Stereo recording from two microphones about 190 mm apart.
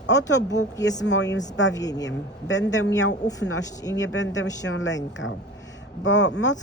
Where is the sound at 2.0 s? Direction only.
70° left (ahead or behind).